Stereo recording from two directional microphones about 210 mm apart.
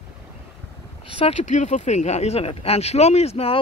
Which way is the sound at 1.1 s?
30° left (ahead or behind).